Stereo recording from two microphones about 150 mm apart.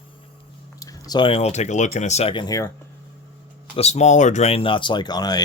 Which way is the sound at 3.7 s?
45° left (ahead or behind).